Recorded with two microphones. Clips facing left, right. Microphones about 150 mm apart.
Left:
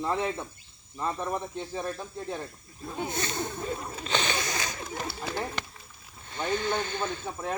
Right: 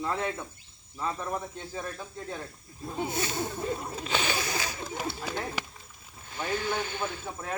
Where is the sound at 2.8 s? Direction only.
5° right (ahead or behind).